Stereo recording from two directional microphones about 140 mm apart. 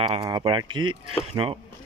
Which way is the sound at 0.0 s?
35° right (ahead or behind).